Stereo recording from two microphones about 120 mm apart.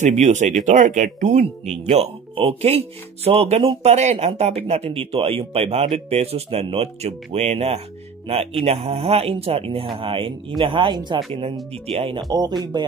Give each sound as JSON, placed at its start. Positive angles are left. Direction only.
{"t": 0.0, "sound": "speech", "side_deg": -75}
{"t": 0.7, "sound": "speech", "side_deg": -90}
{"t": 1.9, "sound": "a man's voice", "side_deg": -50}